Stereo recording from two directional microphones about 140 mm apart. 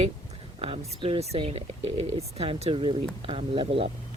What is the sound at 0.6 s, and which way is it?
Speech, 40° right (ahead or behind).